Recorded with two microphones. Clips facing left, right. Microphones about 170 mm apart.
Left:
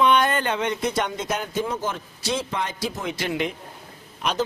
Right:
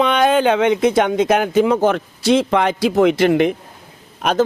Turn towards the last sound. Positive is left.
turn(degrees=-55)  # may be behind; listen again after turning